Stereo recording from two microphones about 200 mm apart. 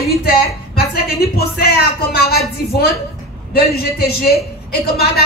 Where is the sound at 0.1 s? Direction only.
50° left (ahead or behind).